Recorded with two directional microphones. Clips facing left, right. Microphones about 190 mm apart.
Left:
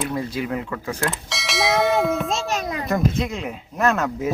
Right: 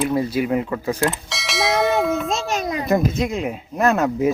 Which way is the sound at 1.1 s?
Centre (ahead or behind).